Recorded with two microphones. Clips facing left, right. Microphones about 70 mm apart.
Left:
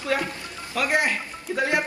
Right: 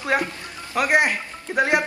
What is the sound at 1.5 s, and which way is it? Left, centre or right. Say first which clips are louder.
Speech: right 4 dB; right.